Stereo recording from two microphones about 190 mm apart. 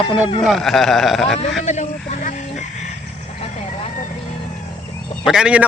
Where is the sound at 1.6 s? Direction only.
35° left (ahead or behind).